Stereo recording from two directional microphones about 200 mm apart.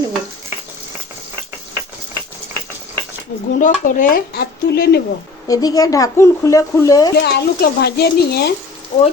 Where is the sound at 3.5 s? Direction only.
40° left (ahead or behind).